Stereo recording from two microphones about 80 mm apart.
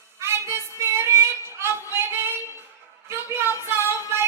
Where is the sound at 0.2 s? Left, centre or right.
Right.